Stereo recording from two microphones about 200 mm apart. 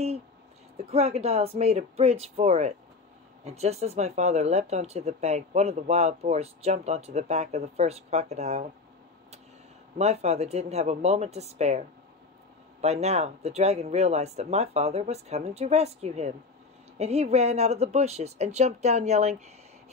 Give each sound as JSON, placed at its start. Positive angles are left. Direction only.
{"t": 0.8, "sound": "speech", "side_deg": -30}
{"t": 9.9, "sound": "speech", "side_deg": -35}
{"t": 12.8, "sound": "speech", "side_deg": -35}